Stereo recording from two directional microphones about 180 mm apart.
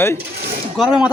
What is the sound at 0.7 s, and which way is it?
Speech, 5° right (ahead or behind).